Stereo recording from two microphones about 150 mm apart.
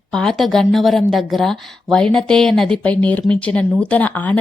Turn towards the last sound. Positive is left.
turn(degrees=10)  # may be behind; listen again after turning